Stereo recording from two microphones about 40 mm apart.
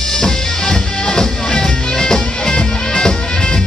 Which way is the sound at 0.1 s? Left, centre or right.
Centre.